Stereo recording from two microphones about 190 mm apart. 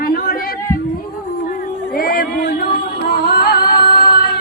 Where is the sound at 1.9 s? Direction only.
50° left (ahead or behind).